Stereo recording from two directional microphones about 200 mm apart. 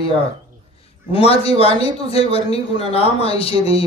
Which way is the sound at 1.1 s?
30° left (ahead or behind).